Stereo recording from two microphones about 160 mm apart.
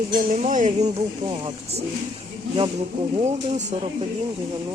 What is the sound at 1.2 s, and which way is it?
Speech, 30° right (ahead or behind).